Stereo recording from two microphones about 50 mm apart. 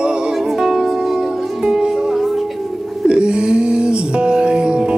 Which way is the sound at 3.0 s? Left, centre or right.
Centre.